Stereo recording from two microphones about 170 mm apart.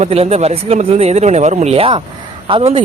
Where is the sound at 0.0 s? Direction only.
40° right (ahead or behind).